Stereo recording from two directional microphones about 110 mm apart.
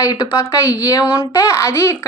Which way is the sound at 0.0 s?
35° left (ahead or behind).